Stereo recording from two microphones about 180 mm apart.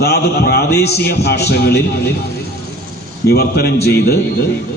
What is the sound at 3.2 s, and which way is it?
Speech, 60° left (ahead or behind).